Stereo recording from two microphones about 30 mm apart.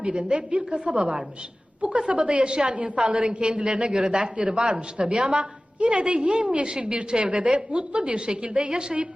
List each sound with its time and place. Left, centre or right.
0.3 s a woman's voice: right
7.9 s a woman's voice: right